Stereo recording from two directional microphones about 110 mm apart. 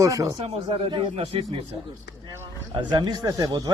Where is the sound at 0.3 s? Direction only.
65° right (ahead or behind).